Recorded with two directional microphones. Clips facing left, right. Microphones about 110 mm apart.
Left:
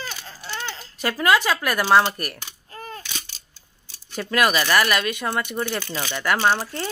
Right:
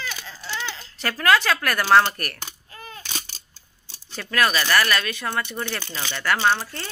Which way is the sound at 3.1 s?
40° right (ahead or behind).